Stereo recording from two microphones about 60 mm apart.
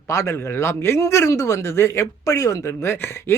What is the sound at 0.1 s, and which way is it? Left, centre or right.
A man's voice, left.